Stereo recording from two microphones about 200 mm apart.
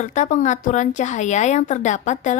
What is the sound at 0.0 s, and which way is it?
Speech, 35° left (ahead or behind).